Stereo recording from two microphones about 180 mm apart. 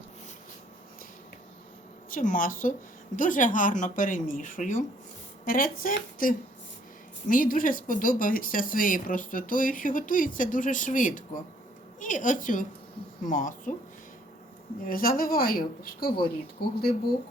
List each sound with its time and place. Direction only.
2.0 s speech: 50° left (ahead or behind)
14.8 s speech: 50° left (ahead or behind)